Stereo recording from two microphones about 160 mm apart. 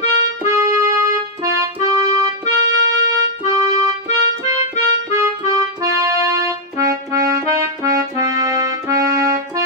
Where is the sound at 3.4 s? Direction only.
20° right (ahead or behind).